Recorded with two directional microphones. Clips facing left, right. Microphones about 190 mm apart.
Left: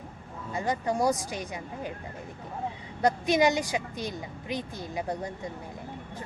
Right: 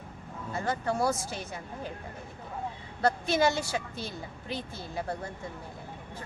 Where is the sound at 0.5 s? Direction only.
15° left (ahead or behind).